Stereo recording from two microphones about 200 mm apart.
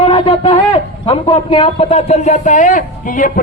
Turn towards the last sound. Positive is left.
turn(degrees=40)  # may be behind; listen again after turning